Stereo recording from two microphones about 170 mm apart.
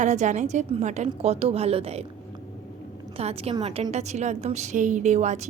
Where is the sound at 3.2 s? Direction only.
35° right (ahead or behind).